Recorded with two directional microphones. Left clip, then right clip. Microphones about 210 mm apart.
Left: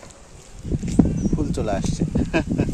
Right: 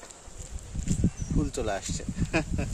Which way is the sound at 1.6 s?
15° left (ahead or behind).